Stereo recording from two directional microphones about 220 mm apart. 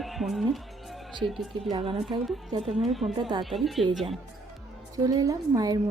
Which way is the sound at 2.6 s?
Centre (ahead or behind).